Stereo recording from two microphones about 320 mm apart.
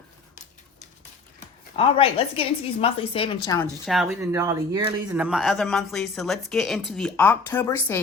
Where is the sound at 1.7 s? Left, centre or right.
Centre.